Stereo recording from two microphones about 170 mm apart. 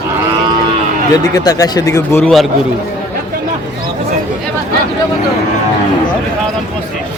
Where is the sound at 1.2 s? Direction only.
20° left (ahead or behind).